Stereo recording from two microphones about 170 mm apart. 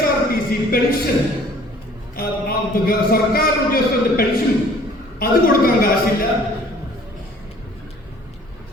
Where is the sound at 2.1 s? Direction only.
60° left (ahead or behind).